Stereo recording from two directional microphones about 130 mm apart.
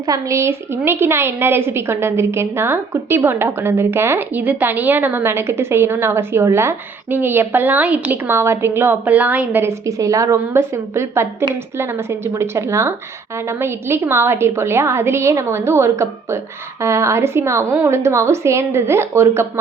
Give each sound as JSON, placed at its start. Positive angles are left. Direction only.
{"t": 0.0, "sound": "a woman's voice", "side_deg": -25}